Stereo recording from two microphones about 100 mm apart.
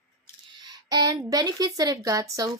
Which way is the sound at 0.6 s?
40° right (ahead or behind).